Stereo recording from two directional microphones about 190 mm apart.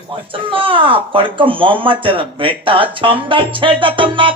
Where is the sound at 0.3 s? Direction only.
25° right (ahead or behind).